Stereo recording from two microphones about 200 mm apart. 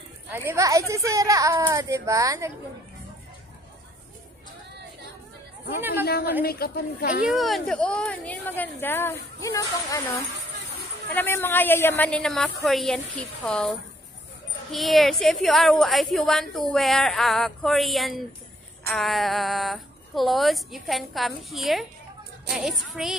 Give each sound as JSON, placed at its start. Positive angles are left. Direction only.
{"t": 0.3, "sound": "speech", "side_deg": -10}
{"t": 5.8, "sound": "speech", "side_deg": -10}
{"t": 6.0, "sound": "a woman's voice", "side_deg": 50}
{"t": 7.2, "sound": "speech", "side_deg": 0}